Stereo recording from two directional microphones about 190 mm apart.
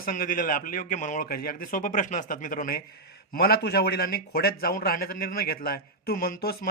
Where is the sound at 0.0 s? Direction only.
45° left (ahead or behind).